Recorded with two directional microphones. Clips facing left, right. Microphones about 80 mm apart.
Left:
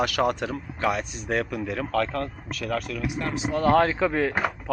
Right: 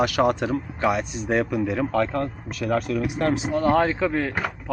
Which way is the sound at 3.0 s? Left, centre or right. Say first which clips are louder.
Right 6 dB; right.